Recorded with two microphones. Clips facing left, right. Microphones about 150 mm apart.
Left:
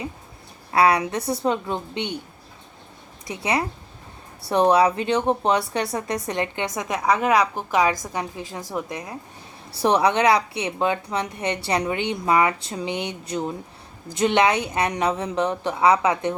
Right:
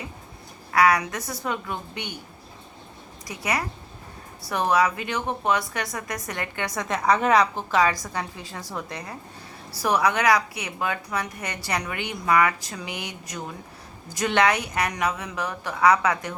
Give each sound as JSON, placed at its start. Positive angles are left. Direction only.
{"t": 0.7, "sound": "speech", "side_deg": 25}
{"t": 3.2, "sound": "a woman's voice", "side_deg": 25}
{"t": 9.8, "sound": "speech", "side_deg": 30}